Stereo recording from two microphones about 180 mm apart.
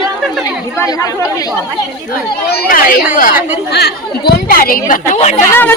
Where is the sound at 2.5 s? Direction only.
55° left (ahead or behind).